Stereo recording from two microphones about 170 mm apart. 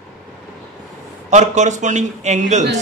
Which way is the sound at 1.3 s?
45° right (ahead or behind).